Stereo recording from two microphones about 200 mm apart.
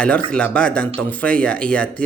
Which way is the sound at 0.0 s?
5° left (ahead or behind).